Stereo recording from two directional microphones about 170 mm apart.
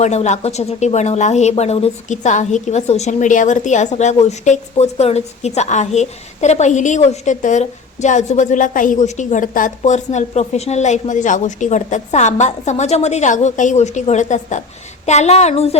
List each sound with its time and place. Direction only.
0.0 s a woman's voice: 40° left (ahead or behind)